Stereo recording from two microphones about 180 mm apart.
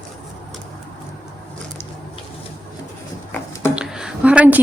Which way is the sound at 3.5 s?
15° left (ahead or behind).